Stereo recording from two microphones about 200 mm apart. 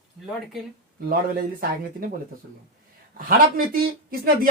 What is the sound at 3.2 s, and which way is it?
Speech, 45° right (ahead or behind).